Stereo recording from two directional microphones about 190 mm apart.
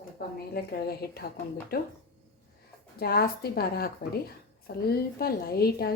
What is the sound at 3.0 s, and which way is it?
Speech, 55° left (ahead or behind).